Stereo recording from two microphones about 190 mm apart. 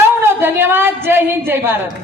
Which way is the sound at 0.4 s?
10° right (ahead or behind).